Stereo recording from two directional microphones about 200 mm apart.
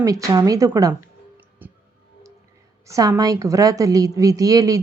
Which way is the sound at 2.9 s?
15° right (ahead or behind).